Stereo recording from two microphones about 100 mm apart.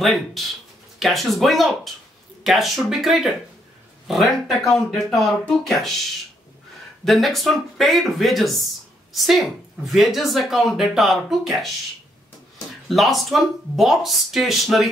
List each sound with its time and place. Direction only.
0.0 s speech: centre (ahead or behind)
7.1 s speech: centre (ahead or behind)
12.8 s speech: centre (ahead or behind)